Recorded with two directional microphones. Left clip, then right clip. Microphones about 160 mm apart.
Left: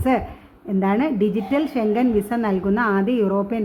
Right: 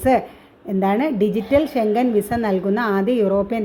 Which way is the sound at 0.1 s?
20° right (ahead or behind).